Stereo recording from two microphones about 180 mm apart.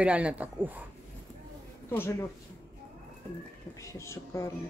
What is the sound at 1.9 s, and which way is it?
Speech, 15° left (ahead or behind).